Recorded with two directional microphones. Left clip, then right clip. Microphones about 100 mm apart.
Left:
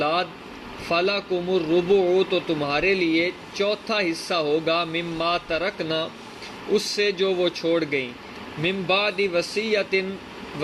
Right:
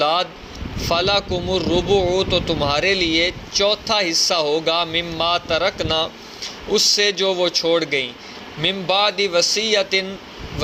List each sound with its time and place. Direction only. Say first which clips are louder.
0.9 s speech: right 4 dB; 30° right (ahead or behind)